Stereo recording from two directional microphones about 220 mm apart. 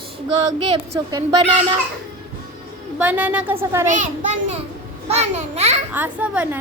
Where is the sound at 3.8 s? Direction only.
35° right (ahead or behind).